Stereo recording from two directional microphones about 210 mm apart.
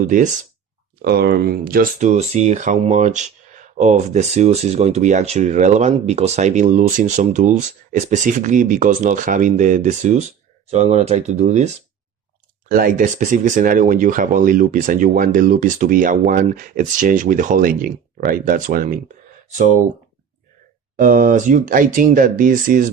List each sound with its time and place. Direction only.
1.0 s speech: 50° right (ahead or behind); by 11.7 s 35° right (ahead or behind)
12.6 s speech: 45° right (ahead or behind)
20.9 s speech: 40° right (ahead or behind)